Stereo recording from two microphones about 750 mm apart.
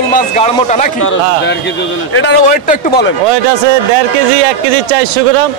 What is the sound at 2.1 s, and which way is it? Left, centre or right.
A man's voice, centre.